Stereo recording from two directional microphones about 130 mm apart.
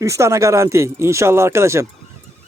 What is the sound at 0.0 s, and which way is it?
Speech, 25° right (ahead or behind).